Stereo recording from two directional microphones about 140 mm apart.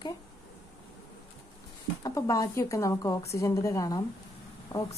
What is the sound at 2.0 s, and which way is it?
A woman's voice, 25° left (ahead or behind).